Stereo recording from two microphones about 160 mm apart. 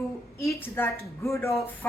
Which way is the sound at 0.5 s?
15° left (ahead or behind).